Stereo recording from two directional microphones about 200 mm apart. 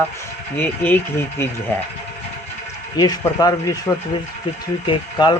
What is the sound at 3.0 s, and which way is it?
Speech, 20° left (ahead or behind).